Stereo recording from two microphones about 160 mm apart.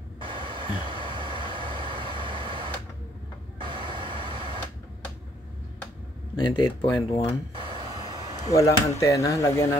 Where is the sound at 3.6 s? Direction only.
30° right (ahead or behind).